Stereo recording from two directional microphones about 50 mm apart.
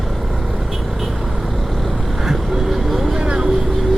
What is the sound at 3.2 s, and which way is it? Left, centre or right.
Vehicle, centre.